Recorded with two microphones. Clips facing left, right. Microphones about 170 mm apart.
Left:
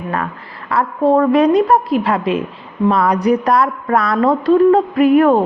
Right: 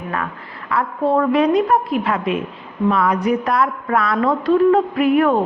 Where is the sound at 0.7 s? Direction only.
40° left (ahead or behind).